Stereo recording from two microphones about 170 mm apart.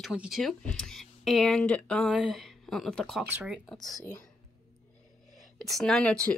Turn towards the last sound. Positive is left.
turn(degrees=5)  # may be behind; listen again after turning